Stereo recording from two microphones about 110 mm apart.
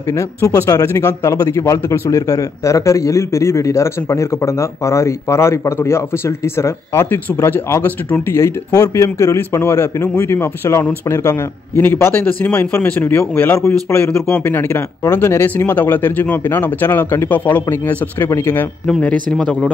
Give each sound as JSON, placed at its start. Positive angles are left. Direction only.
{"t": 0.1, "sound": "speech", "side_deg": 25}
{"t": 13.5, "sound": "speech", "side_deg": 25}
{"t": 14.0, "sound": "speech", "side_deg": 10}
{"t": 14.4, "sound": "speech", "side_deg": 20}
{"t": 18.9, "sound": "speech", "side_deg": 10}